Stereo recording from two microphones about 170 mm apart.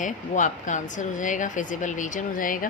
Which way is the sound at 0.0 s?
50° left (ahead or behind).